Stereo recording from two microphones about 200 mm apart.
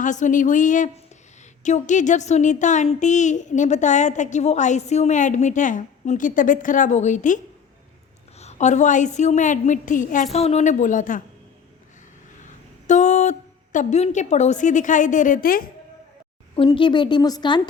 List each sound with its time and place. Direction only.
0.0 s a woman's voice: 40° left (ahead or behind)
8.4 s a woman's voice: 35° left (ahead or behind)
12.4 s a sound: 35° left (ahead or behind)
13.7 s a woman's voice: 35° left (ahead or behind)
16.6 s a woman's voice: 25° left (ahead or behind)